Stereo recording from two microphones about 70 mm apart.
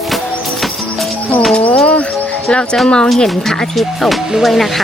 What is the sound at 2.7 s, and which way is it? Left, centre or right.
Music, centre.